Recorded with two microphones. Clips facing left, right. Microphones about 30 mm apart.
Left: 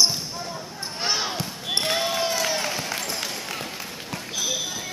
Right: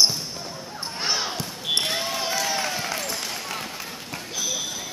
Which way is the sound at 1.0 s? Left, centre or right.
Centre.